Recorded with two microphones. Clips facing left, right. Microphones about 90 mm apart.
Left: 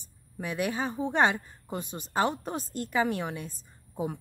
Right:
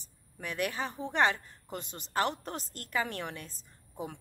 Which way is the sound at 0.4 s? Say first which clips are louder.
Left 4 dB; 10° left (ahead or behind).